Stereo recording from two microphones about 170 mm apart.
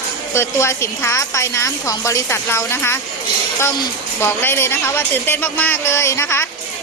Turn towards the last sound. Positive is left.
turn(degrees=15)  # may be behind; listen again after turning